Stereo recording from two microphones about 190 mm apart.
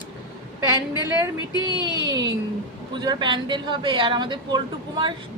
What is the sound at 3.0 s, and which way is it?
Speech, 25° right (ahead or behind).